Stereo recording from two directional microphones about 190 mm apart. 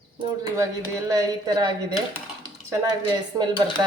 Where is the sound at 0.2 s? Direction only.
15° right (ahead or behind).